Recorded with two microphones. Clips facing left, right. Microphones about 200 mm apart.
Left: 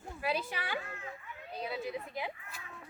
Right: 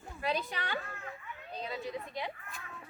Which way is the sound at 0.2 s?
5° left (ahead or behind).